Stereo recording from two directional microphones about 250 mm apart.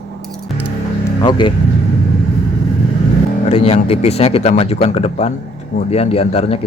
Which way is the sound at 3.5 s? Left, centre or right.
Left.